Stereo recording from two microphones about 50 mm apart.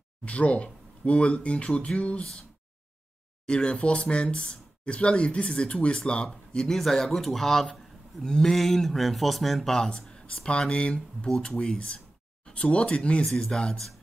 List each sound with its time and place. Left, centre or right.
0.2 s speech: left
3.4 s speech: centre
13.2 s speech: centre